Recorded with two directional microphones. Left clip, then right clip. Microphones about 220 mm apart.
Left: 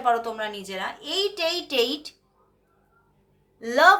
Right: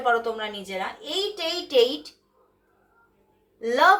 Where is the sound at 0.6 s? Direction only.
30° left (ahead or behind).